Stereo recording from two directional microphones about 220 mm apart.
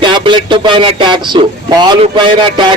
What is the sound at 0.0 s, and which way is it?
A man's voice, 20° right (ahead or behind).